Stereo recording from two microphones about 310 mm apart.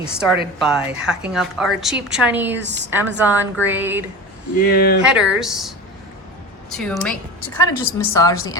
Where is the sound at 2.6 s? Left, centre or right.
Right.